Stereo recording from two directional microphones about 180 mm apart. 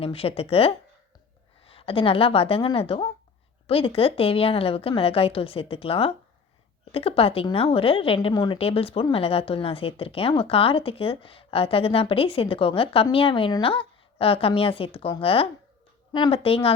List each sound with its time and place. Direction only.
0.0 s a woman's voice: 30° left (ahead or behind)